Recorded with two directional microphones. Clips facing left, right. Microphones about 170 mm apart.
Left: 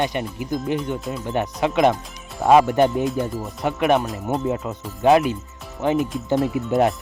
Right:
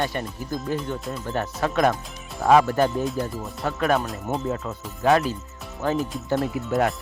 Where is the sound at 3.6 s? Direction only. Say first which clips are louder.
Left 4 dB; 20° left (ahead or behind).